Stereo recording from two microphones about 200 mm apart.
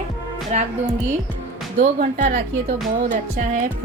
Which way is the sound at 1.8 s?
40° right (ahead or behind).